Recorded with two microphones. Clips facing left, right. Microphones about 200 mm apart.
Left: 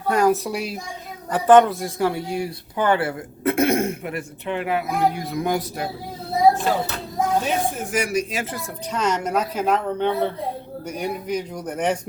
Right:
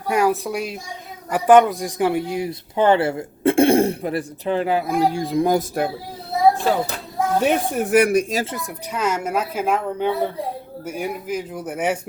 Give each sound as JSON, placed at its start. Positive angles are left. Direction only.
{"t": 0.1, "sound": "speech", "side_deg": -5}
{"t": 1.3, "sound": "speech", "side_deg": -10}
{"t": 5.5, "sound": "speech", "side_deg": -55}
{"t": 7.4, "sound": "speech", "side_deg": -60}
{"t": 8.4, "sound": "speech", "side_deg": -15}